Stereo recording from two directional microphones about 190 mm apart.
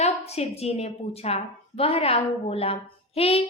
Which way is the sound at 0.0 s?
35° left (ahead or behind).